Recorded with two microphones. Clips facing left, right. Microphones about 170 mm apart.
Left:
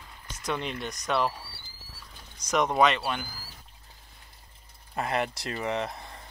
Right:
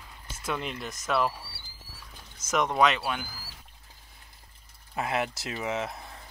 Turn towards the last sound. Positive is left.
turn(degrees=0)  # may be behind; listen again after turning